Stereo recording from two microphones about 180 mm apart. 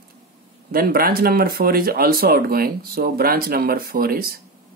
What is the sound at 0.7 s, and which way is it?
Speech, 55° right (ahead or behind).